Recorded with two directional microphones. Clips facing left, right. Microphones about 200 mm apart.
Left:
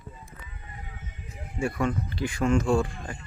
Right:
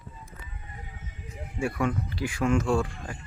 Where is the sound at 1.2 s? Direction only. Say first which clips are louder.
Left 1 dB; 10° right (ahead or behind).